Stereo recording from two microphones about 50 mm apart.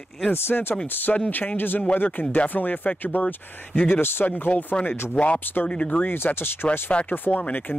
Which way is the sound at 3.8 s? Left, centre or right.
Left.